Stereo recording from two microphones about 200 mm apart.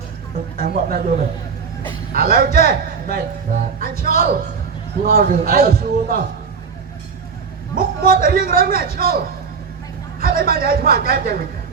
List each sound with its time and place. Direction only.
0.5 s speech: 50° right (ahead or behind)
2.1 s speech: 50° right (ahead or behind)
7.8 s a man's voice: 45° right (ahead or behind)